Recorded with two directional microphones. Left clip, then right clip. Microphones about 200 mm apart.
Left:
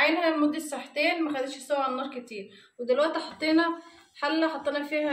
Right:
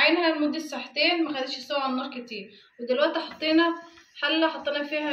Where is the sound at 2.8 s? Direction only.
60° left (ahead or behind).